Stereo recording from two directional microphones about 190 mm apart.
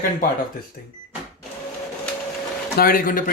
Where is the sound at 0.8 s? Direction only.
50° left (ahead or behind).